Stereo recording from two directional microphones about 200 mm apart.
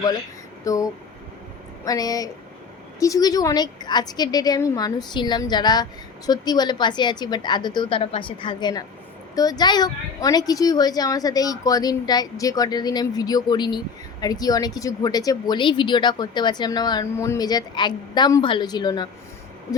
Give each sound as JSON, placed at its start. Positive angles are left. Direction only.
{"t": 0.6, "sound": "speech", "side_deg": 15}